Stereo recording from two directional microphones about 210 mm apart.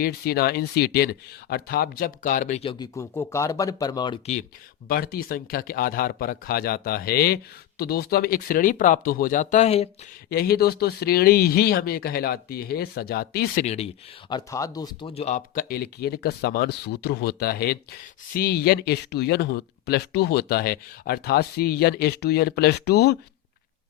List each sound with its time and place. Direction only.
0.0 s speech: 45° left (ahead or behind); by 4.2 s 20° left (ahead or behind)
4.9 s speech: 45° left (ahead or behind); by 9.9 s 30° left (ahead or behind)
10.2 s speech: 50° left (ahead or behind)
13.7 s speech: 30° left (ahead or behind); by 23.1 s 50° left (ahead or behind)